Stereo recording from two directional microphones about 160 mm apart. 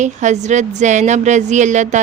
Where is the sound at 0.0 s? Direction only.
50° right (ahead or behind).